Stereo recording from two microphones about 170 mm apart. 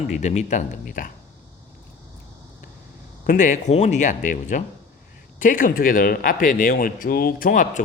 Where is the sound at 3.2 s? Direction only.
50° left (ahead or behind).